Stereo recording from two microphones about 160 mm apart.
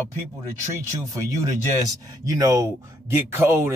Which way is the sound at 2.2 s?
20° right (ahead or behind).